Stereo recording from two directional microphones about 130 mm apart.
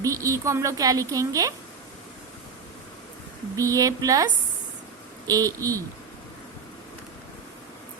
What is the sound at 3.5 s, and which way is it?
A woman's voice, 25° right (ahead or behind).